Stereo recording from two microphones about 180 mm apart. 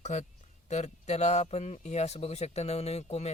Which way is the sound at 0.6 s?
40° left (ahead or behind).